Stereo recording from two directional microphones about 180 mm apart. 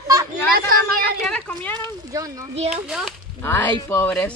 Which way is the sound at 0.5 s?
55° right (ahead or behind).